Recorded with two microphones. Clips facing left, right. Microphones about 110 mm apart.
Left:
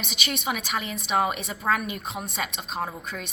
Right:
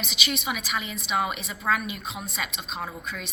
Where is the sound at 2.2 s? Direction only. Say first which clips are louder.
Left 2 dB; 60° left (ahead or behind).